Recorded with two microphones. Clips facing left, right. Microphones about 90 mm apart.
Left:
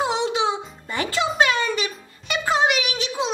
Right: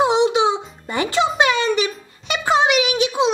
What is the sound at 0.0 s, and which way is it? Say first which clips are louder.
Music: right 6 dB; 20° right (ahead or behind).